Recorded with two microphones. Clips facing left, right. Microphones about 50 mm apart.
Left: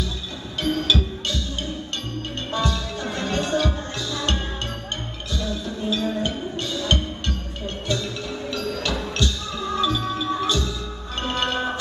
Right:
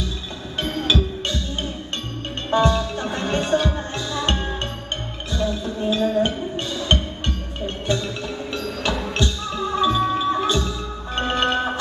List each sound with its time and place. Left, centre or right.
0.6 s music: right
2.5 s music: right